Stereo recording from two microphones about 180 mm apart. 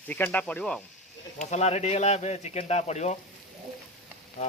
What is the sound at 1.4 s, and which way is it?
Speech, 40° left (ahead or behind).